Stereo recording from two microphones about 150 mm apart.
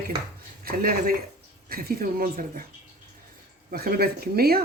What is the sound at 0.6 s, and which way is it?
Speech, 75° right (ahead or behind).